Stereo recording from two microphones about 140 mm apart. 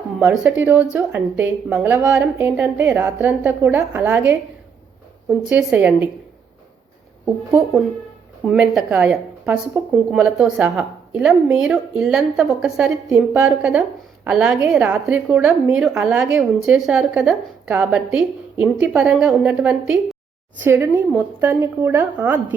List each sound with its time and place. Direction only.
0.2 s a woman's voice: 10° right (ahead or behind)
5.5 s a woman's voice: 10° right (ahead or behind)
8.4 s a woman's voice: 5° right (ahead or behind)
20.7 s a woman's voice: 20° right (ahead or behind)